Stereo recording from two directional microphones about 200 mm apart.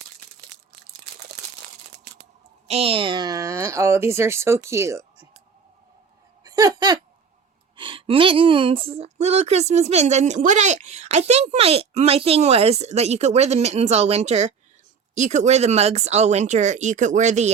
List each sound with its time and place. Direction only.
2.6 s speech: 30° right (ahead or behind); by 5.0 s 15° right (ahead or behind)
6.4 s a sound: 20° right (ahead or behind)
7.8 s a woman's voice: 25° right (ahead or behind)